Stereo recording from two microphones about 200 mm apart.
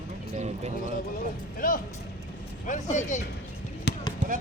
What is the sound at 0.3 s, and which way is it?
Speech, 35° right (ahead or behind).